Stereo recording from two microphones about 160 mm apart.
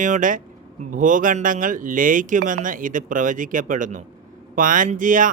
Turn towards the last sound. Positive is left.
turn(degrees=-55)  # may be behind; listen again after turning